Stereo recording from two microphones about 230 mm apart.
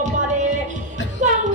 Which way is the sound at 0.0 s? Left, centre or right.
Right.